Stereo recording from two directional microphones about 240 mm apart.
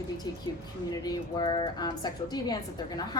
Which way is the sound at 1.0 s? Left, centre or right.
Centre.